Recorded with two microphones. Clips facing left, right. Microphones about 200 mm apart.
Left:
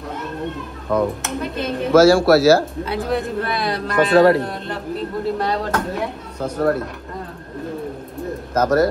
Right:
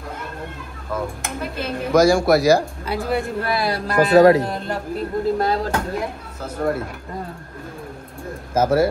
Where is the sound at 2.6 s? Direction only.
Centre (ahead or behind).